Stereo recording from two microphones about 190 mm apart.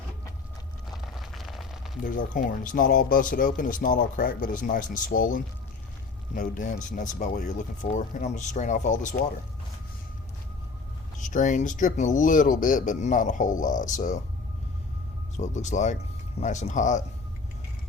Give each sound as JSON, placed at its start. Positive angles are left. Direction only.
{"t": 0.9, "sound": "a sound", "side_deg": 0}
{"t": 2.1, "sound": "speech", "side_deg": 45}
{"t": 11.2, "sound": "speech", "side_deg": 40}
{"t": 15.4, "sound": "speech", "side_deg": 40}